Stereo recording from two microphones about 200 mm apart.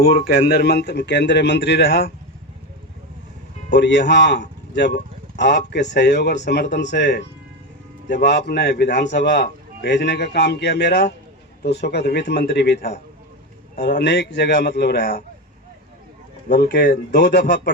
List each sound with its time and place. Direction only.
0.0 s a man's voice: 50° left (ahead or behind)
3.7 s a man's voice: 60° left (ahead or behind)
16.5 s a man's voice: 50° left (ahead or behind)